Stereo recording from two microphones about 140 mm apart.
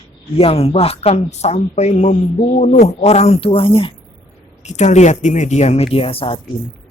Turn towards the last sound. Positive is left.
turn(degrees=40)  # may be behind; listen again after turning